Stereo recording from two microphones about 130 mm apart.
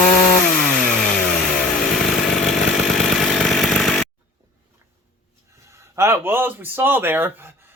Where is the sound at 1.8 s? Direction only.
5° left (ahead or behind).